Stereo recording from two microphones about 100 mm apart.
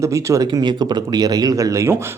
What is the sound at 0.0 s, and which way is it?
Speech, 30° right (ahead or behind).